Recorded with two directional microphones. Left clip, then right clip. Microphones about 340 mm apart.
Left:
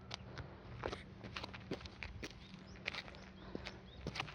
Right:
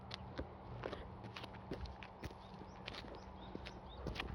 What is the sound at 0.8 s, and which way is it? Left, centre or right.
Biting, centre.